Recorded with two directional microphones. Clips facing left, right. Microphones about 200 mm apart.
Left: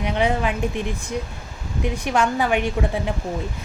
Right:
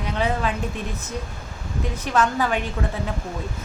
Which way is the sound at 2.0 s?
15° left (ahead or behind).